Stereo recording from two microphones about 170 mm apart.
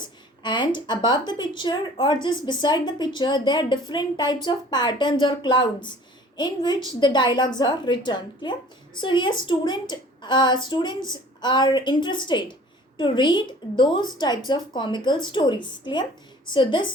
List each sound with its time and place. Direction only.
0.0 s a woman's voice: 25° left (ahead or behind)